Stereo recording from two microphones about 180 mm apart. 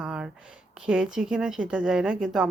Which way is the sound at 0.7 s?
5° right (ahead or behind).